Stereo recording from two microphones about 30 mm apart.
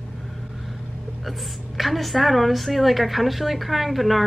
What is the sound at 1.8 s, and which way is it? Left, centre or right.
A woman's voice, centre.